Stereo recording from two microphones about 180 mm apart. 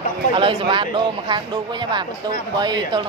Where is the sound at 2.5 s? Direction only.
25° right (ahead or behind).